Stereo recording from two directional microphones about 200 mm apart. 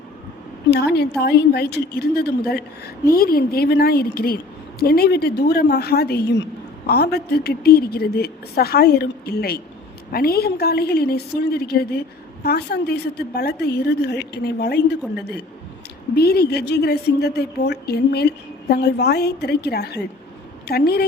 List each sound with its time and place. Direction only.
1.2 s a woman's voice: 55° left (ahead or behind)